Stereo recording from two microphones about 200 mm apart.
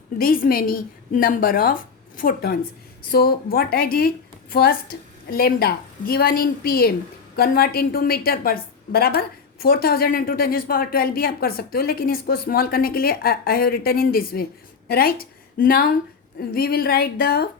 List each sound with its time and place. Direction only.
0.2 s a woman's voice: 45° left (ahead or behind)